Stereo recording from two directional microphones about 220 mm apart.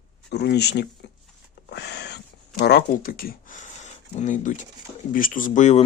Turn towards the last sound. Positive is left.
turn(degrees=35)  # may be behind; listen again after turning